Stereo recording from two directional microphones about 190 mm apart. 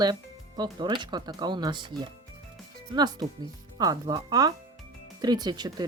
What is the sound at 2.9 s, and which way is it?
Speech, 20° right (ahead or behind).